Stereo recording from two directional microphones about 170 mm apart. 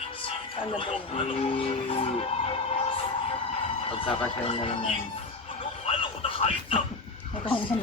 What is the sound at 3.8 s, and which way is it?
Speech, 30° left (ahead or behind).